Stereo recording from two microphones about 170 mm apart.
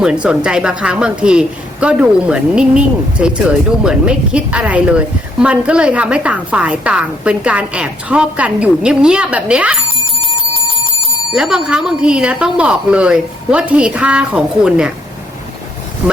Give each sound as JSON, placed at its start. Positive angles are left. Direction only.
{"t": 0.0, "sound": "a woman's voice", "side_deg": -5}
{"t": 10.2, "sound": "bell", "side_deg": 30}
{"t": 11.3, "sound": "speech", "side_deg": -5}